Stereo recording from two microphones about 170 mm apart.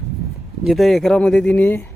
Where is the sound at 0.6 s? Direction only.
Centre (ahead or behind).